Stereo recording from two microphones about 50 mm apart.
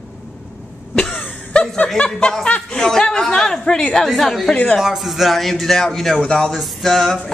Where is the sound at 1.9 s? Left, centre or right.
Left.